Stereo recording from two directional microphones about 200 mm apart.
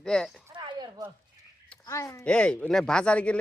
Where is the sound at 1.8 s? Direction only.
15° left (ahead or behind).